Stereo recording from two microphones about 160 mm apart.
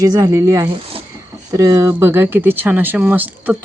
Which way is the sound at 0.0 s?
20° right (ahead or behind).